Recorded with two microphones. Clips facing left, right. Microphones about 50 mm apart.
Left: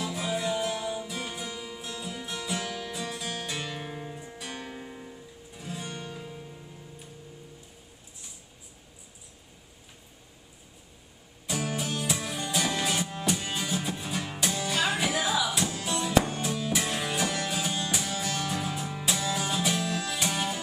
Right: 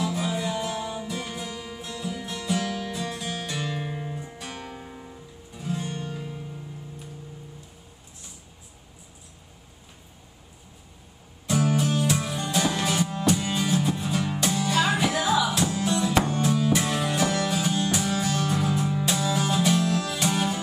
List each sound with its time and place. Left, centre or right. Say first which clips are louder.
0.0 s music: right 3 dB; centre
3.2 s music: right 3 dB; centre
3.9 s music: right 4 dB; right
4.2 s music: right 2 dB; centre
11.4 s music: right 8 dB; centre
18.7 s music: right 6 dB; centre
20.2 s music: right 7 dB; centre